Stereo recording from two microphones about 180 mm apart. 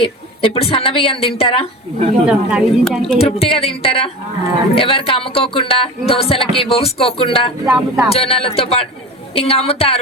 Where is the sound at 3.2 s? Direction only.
35° left (ahead or behind).